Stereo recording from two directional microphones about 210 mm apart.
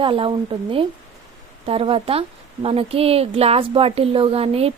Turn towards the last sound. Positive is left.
turn(degrees=-30)  # may be behind; listen again after turning